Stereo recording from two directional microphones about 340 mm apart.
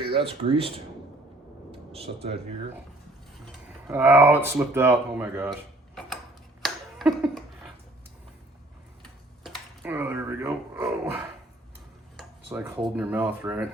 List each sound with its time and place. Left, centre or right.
0.1 s speech: centre
1.9 s speech: centre
3.8 s speech: centre
6.6 s a sound: centre
9.4 s a sound: centre
12.1 s dishes: centre